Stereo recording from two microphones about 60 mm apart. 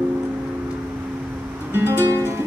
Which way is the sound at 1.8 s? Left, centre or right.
Right.